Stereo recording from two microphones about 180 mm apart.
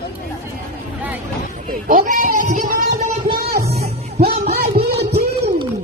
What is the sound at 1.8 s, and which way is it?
Speech, 50° right (ahead or behind).